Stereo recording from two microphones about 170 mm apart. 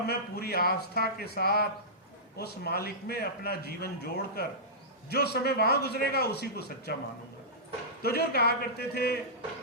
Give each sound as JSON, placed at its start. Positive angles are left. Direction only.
{"t": 0.1, "sound": "a man's voice", "side_deg": 65}
{"t": 8.0, "sound": "a man's voice", "side_deg": 65}